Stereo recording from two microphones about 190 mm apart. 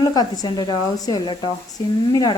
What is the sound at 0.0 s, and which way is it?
A woman's voice, 20° left (ahead or behind).